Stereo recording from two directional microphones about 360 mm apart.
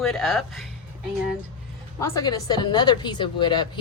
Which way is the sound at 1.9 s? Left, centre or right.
Centre.